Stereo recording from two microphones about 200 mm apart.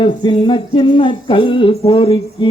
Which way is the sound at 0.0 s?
25° left (ahead or behind).